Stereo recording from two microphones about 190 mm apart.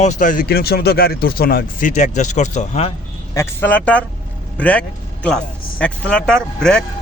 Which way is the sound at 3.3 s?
15° left (ahead or behind).